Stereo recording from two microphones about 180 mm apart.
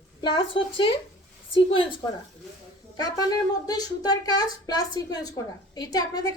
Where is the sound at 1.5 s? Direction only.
30° left (ahead or behind).